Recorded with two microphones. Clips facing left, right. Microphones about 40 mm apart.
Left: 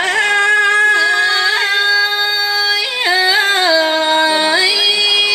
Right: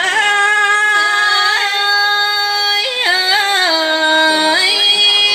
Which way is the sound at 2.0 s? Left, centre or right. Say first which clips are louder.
Right 2 dB; right.